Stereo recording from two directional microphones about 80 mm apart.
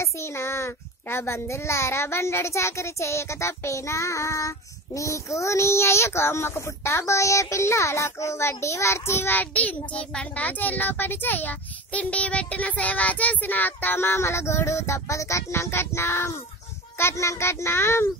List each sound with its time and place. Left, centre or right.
0.0 s a child's voice: left